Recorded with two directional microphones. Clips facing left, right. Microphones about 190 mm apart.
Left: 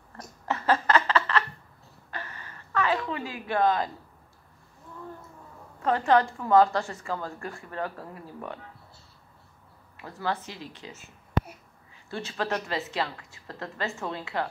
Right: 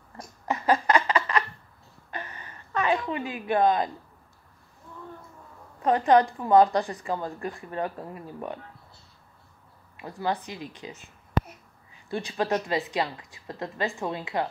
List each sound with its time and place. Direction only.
0.5 s snicker: 15° right (ahead or behind)
2.0 s a sound: 20° right (ahead or behind)
5.8 s a woman's voice: 15° right (ahead or behind)
10.0 s a woman's voice: 15° right (ahead or behind)
12.1 s a woman's voice: 15° right (ahead or behind)